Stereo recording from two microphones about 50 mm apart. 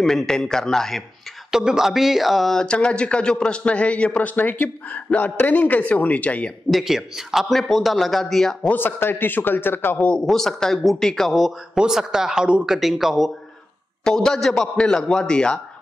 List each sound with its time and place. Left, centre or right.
0.0 s a man's voice: centre
1.5 s speech: centre
2.5 s a man's voice: centre
6.7 s a man's voice: centre
8.7 s a man's voice: left
10.2 s a man's voice: centre
11.7 s speech: centre
14.0 s a man's voice: centre